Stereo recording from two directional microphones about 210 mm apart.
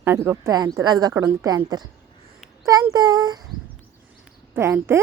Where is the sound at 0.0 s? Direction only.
10° right (ahead or behind).